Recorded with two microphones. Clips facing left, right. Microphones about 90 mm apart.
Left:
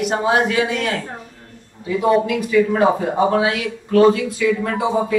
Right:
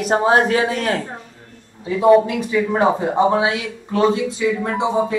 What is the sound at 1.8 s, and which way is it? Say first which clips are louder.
Speech: right 4 dB; 25° right (ahead or behind).